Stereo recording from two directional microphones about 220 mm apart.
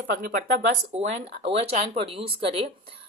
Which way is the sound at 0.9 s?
30° right (ahead or behind).